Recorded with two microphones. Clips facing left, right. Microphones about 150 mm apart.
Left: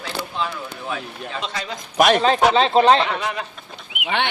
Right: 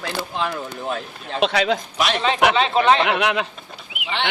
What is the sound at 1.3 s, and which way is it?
Speech, 75° right (ahead or behind).